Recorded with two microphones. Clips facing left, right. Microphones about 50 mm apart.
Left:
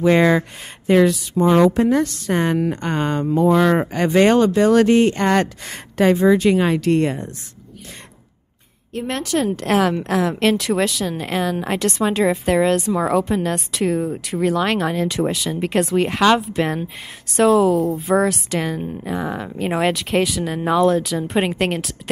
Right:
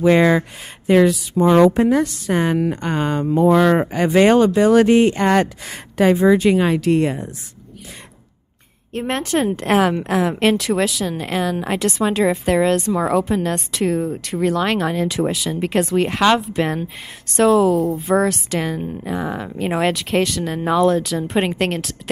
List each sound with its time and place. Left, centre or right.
0.0 s a woman's voice: centre
1.3 s speech: centre
1.6 s a woman's voice: right
1.9 s a woman's voice: centre
8.9 s speech: right
9.5 s a woman's voice: centre